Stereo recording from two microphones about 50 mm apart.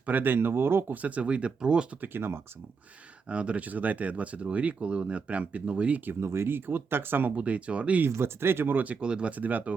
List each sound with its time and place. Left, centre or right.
0.0 s speech: right
1.0 s speech: right
2.0 s speech: right
3.2 s speech: right
6.1 s speech: right
7.3 s speech: right
8.0 s speech: right
8.8 s speech: right
9.0 s speech: centre
9.3 s speech: right